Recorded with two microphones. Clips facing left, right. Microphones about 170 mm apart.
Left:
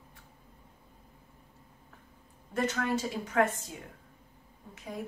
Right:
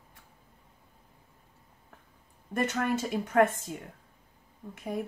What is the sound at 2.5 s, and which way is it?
Speech, 55° right (ahead or behind).